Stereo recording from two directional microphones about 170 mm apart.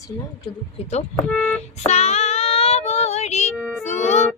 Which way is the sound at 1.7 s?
40° left (ahead or behind).